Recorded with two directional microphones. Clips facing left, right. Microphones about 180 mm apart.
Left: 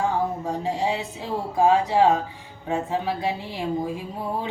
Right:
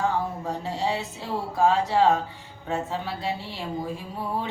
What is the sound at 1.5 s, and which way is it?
A woman's voice, 15° left (ahead or behind).